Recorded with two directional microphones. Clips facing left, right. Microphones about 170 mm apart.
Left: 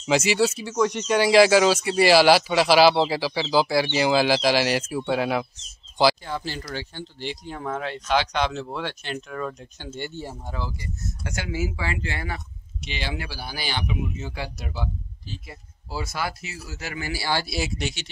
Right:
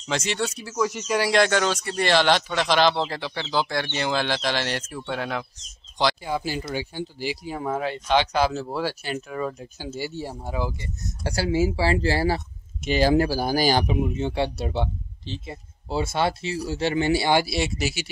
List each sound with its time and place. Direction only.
0.0 s speech: 5° left (ahead or behind)
6.2 s speech: 10° right (ahead or behind)
11.2 s speech: 35° right (ahead or behind)
17.5 s speech: centre (ahead or behind)